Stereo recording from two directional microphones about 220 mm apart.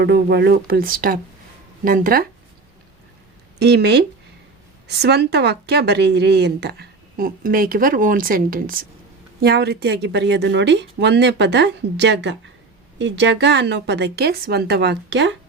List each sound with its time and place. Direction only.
0.0 s a woman's voice: 50° right (ahead or behind)
3.6 s a woman's voice: 50° right (ahead or behind)